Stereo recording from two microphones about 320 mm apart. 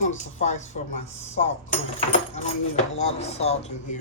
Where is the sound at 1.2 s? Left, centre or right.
Left.